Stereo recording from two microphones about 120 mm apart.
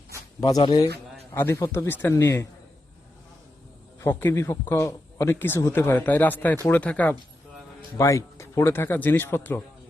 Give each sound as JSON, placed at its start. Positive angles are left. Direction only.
{"t": 0.3, "sound": "a man's voice", "side_deg": 35}
{"t": 4.0, "sound": "a man's voice", "side_deg": 20}
{"t": 7.9, "sound": "a man's voice", "side_deg": 25}